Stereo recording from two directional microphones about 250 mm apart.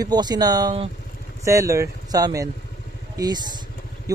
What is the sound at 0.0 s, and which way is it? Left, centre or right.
Speech, centre.